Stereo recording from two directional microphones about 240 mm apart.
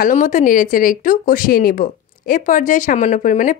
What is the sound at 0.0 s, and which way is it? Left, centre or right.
A woman's voice, left.